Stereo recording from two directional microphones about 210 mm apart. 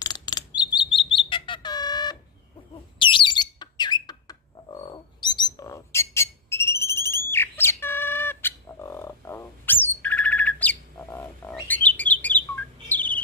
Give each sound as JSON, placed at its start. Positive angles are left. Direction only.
{"t": 0.0, "sound": "chirp", "side_deg": 20}
{"t": 0.6, "sound": "bird", "side_deg": 20}